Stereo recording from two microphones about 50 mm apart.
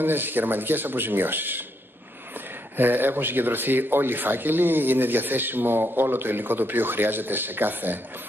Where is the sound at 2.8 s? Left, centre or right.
Right.